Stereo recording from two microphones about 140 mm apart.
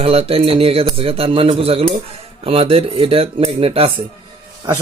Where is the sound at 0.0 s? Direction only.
45° right (ahead or behind).